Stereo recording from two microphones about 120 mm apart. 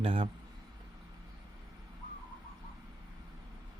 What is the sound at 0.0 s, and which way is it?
Speech, 50° right (ahead or behind).